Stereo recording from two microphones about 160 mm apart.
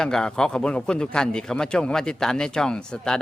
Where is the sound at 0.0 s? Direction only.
5° left (ahead or behind).